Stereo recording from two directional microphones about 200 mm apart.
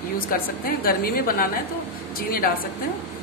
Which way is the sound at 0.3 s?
45° left (ahead or behind).